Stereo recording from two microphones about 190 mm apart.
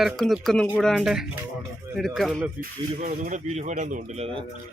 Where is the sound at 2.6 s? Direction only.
45° right (ahead or behind).